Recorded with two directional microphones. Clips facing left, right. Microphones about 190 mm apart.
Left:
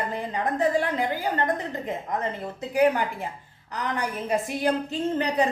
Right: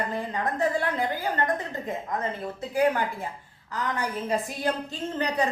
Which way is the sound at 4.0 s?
15° left (ahead or behind).